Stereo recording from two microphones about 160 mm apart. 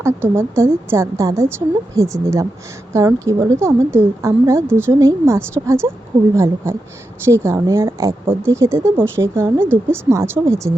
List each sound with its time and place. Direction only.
0.0 s speech: 15° right (ahead or behind)